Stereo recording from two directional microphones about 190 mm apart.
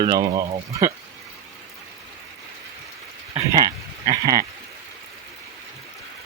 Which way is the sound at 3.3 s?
15° right (ahead or behind).